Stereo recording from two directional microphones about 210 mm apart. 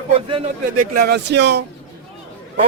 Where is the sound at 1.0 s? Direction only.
50° right (ahead or behind).